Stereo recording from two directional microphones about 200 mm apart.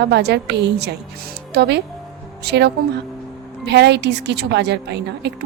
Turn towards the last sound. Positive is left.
turn(degrees=-55)  # may be behind; listen again after turning